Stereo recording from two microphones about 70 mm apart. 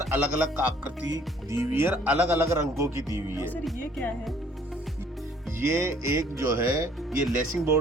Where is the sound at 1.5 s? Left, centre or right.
Right.